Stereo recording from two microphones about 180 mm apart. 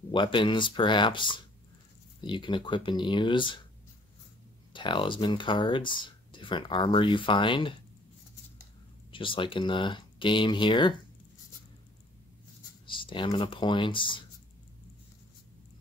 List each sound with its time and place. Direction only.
0.1 s speech: 25° left (ahead or behind)
4.7 s speech: 25° left (ahead or behind)
9.1 s speech: 30° left (ahead or behind)
12.8 s speech: 25° left (ahead or behind)